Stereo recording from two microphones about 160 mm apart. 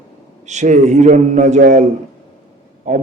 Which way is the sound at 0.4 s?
50° right (ahead or behind).